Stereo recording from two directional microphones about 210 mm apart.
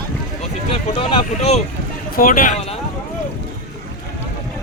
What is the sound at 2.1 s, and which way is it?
Speech, 45° left (ahead or behind).